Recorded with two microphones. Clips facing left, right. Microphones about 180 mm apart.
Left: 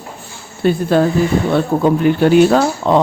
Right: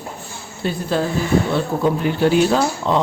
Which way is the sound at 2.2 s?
60° left (ahead or behind).